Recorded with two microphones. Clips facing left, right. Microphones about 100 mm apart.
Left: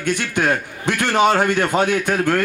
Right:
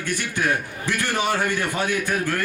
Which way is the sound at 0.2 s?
60° left (ahead or behind).